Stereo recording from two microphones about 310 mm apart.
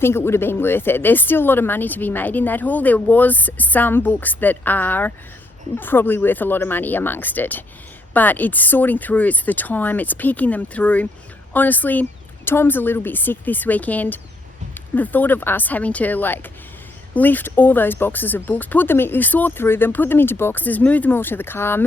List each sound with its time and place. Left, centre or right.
0.0 s speech: centre